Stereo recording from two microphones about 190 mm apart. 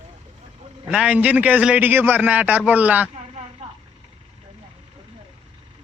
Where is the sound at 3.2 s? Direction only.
40° right (ahead or behind).